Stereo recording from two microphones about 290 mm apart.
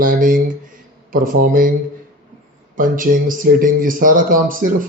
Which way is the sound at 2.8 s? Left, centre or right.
Right.